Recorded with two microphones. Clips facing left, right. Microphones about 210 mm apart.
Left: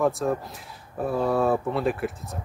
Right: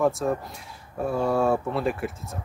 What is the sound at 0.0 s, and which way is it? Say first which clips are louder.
Speech: even; centre (ahead or behind).